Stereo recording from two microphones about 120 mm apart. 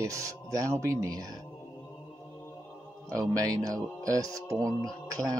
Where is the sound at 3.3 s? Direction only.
30° right (ahead or behind).